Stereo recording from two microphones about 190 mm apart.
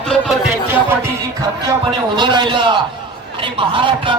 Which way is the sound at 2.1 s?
25° right (ahead or behind).